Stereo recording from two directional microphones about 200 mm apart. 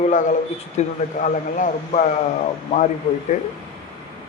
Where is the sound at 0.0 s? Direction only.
40° left (ahead or behind).